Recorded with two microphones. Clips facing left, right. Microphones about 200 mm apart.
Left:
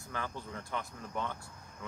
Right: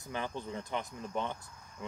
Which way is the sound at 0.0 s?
20° right (ahead or behind).